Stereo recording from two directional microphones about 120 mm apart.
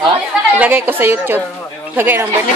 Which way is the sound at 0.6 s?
15° right (ahead or behind).